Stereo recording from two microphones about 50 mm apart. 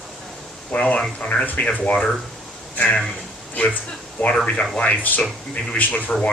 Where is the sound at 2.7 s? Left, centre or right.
Left.